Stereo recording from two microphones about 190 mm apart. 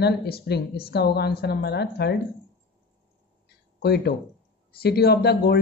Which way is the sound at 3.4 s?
60° left (ahead or behind).